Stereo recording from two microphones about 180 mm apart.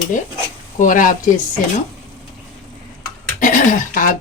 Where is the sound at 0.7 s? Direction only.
45° left (ahead or behind).